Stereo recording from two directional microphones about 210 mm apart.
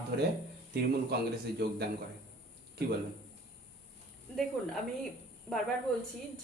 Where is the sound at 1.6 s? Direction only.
50° right (ahead or behind).